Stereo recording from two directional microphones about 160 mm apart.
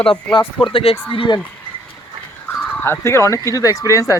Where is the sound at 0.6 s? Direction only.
35° left (ahead or behind).